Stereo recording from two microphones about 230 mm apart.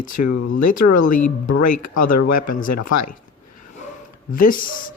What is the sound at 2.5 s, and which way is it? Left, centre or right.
Speech, left.